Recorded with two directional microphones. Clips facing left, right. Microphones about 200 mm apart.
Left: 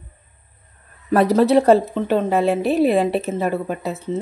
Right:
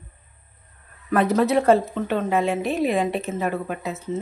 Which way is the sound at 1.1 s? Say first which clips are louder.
Left 5 dB; 35° left (ahead or behind).